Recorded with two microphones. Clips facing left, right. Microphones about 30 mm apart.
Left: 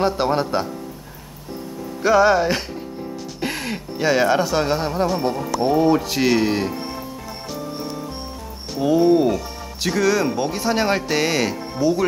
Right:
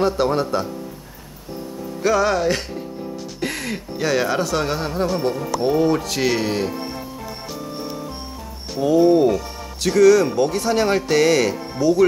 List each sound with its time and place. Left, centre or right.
0.0 s speech: centre
2.0 s speech: centre
8.7 s speech: centre